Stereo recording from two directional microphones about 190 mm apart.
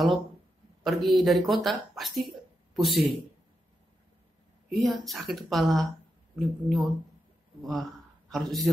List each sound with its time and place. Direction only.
0.8 s speech: centre (ahead or behind)
4.7 s a man's voice: centre (ahead or behind)